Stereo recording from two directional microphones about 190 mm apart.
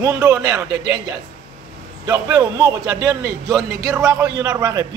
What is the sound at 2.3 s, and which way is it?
Speech, 20° right (ahead or behind).